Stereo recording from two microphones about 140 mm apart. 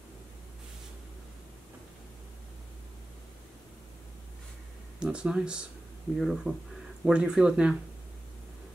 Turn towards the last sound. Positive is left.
turn(degrees=-5)  # may be behind; listen again after turning